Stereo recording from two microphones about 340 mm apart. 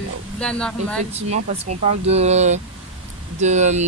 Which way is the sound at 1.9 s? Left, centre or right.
Centre.